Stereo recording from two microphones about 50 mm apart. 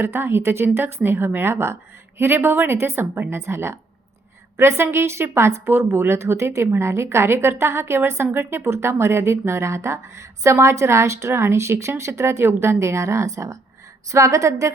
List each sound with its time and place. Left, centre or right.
0.0 s a woman's voice: right
2.7 s a woman's voice: right